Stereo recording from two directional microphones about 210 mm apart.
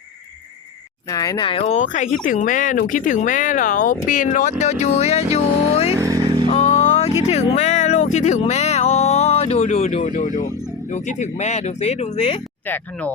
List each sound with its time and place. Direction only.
1.1 s speech: 15° left (ahead or behind)
5.9 s vehicle: 15° right (ahead or behind)
6.5 s a sound: 30° left (ahead or behind)
7.3 s speech: 30° left (ahead or behind)
12.6 s speech: 10° left (ahead or behind)